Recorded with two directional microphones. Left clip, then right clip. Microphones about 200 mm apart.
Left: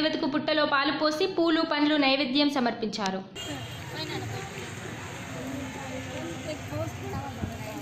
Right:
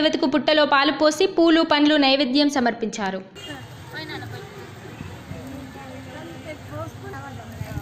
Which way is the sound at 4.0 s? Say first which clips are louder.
Right 2 dB; centre (ahead or behind).